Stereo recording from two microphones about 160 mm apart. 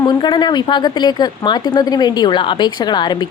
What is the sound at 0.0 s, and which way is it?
Speech, 25° left (ahead or behind).